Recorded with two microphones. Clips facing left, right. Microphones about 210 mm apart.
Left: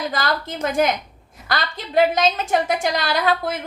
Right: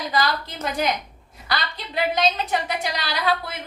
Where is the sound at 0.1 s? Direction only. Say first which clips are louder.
Even; 50° left (ahead or behind).